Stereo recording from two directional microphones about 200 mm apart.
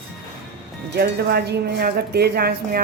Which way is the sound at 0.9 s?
55° right (ahead or behind).